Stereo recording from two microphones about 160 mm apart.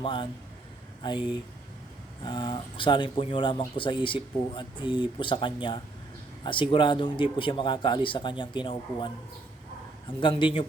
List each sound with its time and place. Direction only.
0.0 s speech: 30° left (ahead or behind)
2.2 s speech: 30° left (ahead or behind)
10.2 s speech: 30° left (ahead or behind)